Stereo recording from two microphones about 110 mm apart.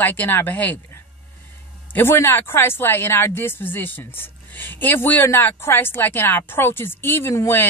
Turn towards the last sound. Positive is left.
turn(degrees=20)  # may be behind; listen again after turning